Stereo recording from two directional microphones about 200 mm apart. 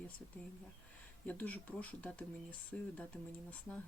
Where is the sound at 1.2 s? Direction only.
10° left (ahead or behind).